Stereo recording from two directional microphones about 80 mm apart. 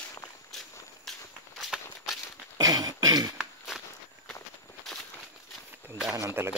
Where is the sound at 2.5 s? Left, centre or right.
Right.